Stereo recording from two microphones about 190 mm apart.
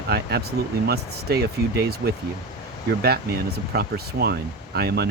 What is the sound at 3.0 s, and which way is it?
Speech, 55° right (ahead or behind).